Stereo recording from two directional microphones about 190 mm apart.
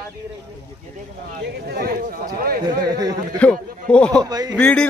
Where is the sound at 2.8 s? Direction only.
20° right (ahead or behind).